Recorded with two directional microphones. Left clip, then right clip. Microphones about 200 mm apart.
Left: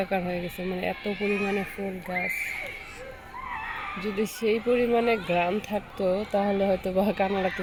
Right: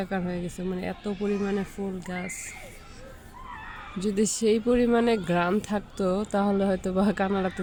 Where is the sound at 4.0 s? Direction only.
20° right (ahead or behind).